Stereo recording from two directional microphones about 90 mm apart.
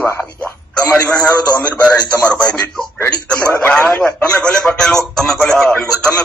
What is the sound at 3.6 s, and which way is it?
A man's voice, 15° left (ahead or behind).